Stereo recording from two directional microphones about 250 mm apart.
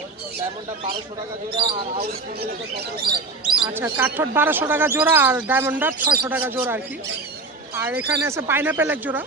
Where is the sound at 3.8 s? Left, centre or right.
Centre.